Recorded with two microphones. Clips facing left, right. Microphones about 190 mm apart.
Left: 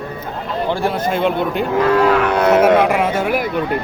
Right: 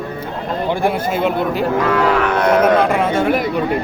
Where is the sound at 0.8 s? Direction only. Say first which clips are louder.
Even; 5° right (ahead or behind).